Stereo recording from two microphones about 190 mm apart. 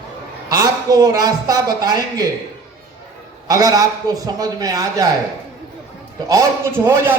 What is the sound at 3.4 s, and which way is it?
A man's voice, 20° right (ahead or behind).